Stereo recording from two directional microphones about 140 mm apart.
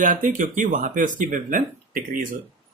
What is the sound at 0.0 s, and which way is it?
Speech, 65° right (ahead or behind).